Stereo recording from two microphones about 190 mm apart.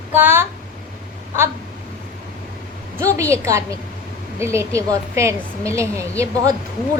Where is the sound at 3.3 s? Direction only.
15° right (ahead or behind).